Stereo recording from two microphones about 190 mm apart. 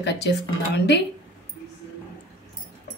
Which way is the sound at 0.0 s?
65° left (ahead or behind).